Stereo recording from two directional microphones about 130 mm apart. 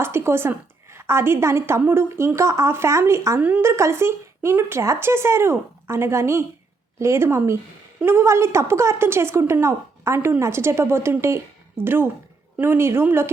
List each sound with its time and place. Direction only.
0.0 s a woman's voice: 20° right (ahead or behind)